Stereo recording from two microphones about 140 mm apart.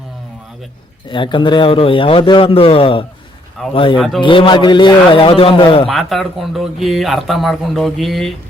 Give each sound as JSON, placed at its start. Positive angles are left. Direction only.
{"t": 1.1, "sound": "a man's voice", "side_deg": 35}
{"t": 3.6, "sound": "speech", "side_deg": 0}
{"t": 4.2, "sound": "a man's voice", "side_deg": 35}
{"t": 5.9, "sound": "speech", "side_deg": 0}